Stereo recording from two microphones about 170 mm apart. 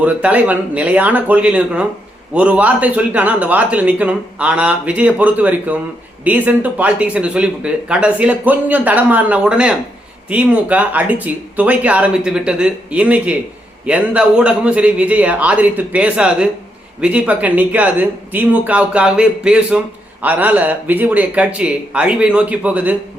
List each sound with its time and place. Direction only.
0.0 s speech: 10° right (ahead or behind)